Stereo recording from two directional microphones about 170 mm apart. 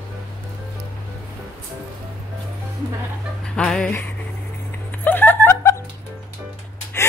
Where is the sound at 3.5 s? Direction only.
5° left (ahead or behind).